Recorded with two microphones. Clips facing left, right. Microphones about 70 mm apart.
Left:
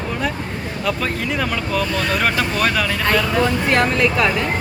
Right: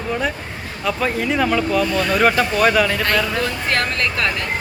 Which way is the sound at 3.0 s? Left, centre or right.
Centre.